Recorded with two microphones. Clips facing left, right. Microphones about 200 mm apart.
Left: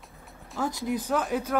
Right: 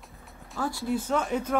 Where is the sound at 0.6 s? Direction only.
20° left (ahead or behind).